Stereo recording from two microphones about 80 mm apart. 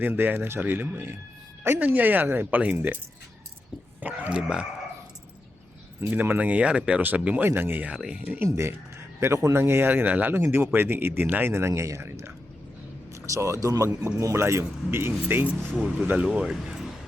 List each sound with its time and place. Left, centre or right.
0.0 s speech: right
4.0 s speech: centre
6.0 s speech: right
7.9 s speech: centre
8.4 s a man's voice: right
15.7 s speech: centre